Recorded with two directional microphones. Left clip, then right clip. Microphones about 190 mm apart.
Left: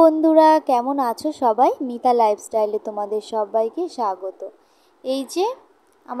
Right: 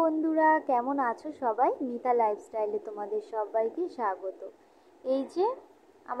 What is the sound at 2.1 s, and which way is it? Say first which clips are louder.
Speech: left 8 dB; 85° left.